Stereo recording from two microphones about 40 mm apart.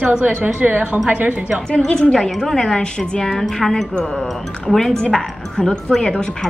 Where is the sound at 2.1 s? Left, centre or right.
Centre.